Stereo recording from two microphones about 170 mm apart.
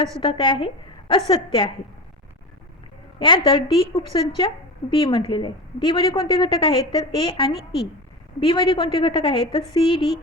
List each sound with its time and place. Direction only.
0.2 s a woman's voice: 30° left (ahead or behind)
3.2 s a woman's voice: 30° left (ahead or behind)